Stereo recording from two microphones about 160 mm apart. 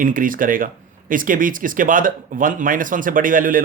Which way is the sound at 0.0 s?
60° right (ahead or behind).